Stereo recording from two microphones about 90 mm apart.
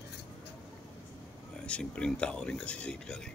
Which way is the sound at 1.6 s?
10° left (ahead or behind).